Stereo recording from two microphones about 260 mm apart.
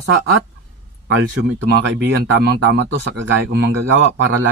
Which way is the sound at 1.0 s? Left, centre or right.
Right.